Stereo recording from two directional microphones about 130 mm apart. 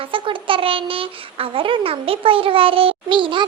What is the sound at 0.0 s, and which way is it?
Speech, 40° right (ahead or behind).